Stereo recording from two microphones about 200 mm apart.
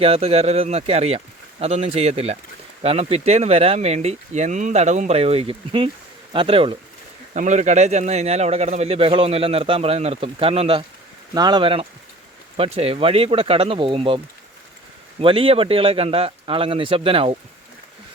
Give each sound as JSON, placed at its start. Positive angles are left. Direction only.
{"t": 0.0, "sound": "a man's voice", "side_deg": -30}
{"t": 7.3, "sound": "a man's voice", "side_deg": -35}
{"t": 15.2, "sound": "speech", "side_deg": -25}